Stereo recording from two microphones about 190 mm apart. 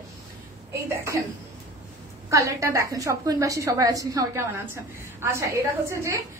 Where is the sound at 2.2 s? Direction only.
15° right (ahead or behind).